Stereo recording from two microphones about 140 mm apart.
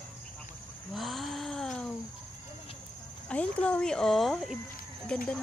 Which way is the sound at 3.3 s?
10° left (ahead or behind).